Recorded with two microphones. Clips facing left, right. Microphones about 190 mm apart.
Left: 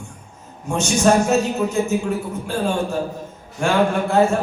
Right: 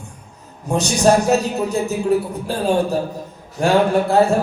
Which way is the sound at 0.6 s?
35° right (ahead or behind).